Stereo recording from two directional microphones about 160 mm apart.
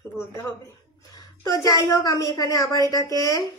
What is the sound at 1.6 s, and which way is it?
A woman's voice, 20° left (ahead or behind).